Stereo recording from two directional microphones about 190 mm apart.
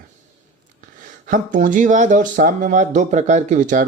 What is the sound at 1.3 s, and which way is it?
Speech, 45° right (ahead or behind).